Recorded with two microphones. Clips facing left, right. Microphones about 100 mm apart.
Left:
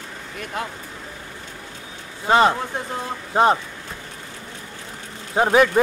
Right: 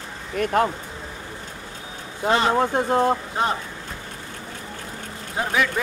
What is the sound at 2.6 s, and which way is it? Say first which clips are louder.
Speech: right 9 dB; 65° right (ahead or behind).